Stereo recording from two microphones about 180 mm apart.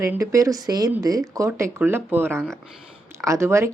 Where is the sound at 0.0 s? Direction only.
15° right (ahead or behind).